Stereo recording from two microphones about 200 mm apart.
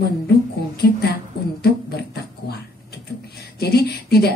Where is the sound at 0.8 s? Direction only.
55° left (ahead or behind).